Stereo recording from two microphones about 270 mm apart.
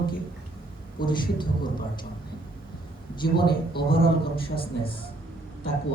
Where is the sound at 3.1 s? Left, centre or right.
Centre.